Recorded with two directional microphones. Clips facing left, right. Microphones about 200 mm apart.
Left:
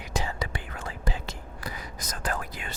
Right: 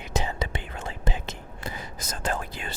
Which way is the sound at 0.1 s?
20° right (ahead or behind).